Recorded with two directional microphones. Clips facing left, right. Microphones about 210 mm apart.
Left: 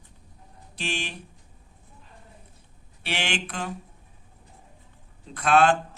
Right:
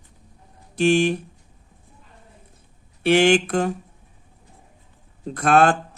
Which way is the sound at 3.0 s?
45° right (ahead or behind).